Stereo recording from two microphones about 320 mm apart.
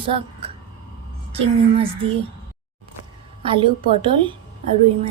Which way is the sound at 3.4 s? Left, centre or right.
Centre.